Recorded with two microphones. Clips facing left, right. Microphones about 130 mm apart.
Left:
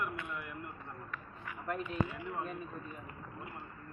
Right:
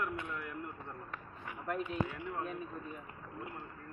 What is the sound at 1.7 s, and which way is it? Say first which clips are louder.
Speech: even; 5° right (ahead or behind).